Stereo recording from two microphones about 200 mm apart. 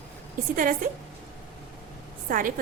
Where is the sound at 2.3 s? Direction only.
45° right (ahead or behind).